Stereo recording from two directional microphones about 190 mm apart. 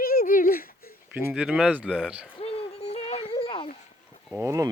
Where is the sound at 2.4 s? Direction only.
30° left (ahead or behind).